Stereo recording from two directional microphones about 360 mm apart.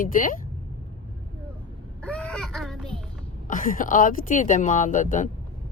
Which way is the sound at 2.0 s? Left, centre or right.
Centre.